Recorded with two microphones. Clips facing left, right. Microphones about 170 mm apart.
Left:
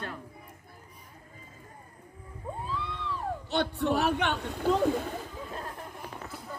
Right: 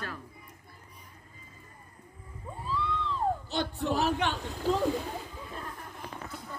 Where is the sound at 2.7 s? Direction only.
65° left (ahead or behind).